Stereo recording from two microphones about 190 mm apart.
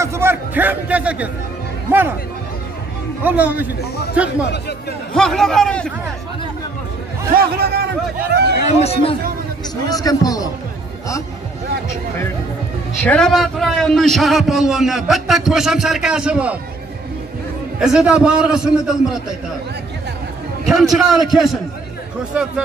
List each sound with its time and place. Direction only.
0.0 s a man's voice: 15° right (ahead or behind)
3.3 s a man's voice: 10° right (ahead or behind)
7.3 s a man's voice: 55° right (ahead or behind)
8.6 s speech: 35° left (ahead or behind)
9.8 s a man's voice: 20° left (ahead or behind)
13.0 s a man's voice: 5° left (ahead or behind)
17.7 s a man's voice: 5° right (ahead or behind)
20.9 s a man's voice: centre (ahead or behind)